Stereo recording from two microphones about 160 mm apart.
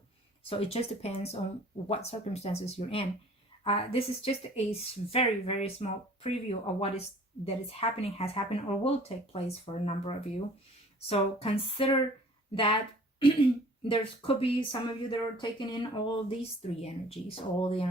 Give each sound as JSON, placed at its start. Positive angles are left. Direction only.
{"t": 0.4, "sound": "speech", "side_deg": 35}
{"t": 13.8, "sound": "speech", "side_deg": 30}